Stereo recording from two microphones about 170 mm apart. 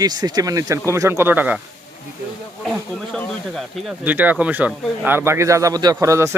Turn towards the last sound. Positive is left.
turn(degrees=-15)  # may be behind; listen again after turning